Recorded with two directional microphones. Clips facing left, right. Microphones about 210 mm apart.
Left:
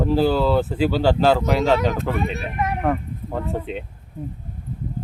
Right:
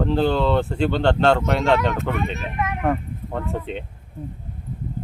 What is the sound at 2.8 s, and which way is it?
Speech, centre (ahead or behind).